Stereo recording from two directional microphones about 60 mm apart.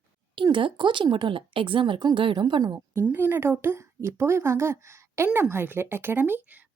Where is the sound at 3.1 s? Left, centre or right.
Right.